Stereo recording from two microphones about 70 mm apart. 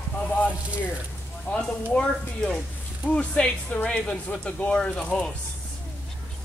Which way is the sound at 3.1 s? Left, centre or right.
Centre.